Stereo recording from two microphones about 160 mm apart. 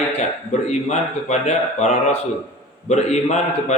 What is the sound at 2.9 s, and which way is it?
Speech, 45° left (ahead or behind).